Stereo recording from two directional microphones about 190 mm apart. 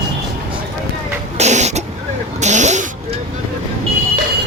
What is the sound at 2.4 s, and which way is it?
Vehicle, 40° right (ahead or behind).